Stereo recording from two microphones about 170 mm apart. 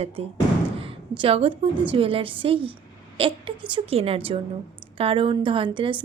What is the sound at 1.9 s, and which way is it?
A woman's voice, 30° right (ahead or behind).